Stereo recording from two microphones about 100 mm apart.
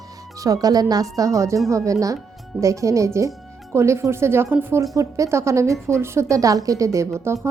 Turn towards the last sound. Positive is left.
turn(degrees=-25)  # may be behind; listen again after turning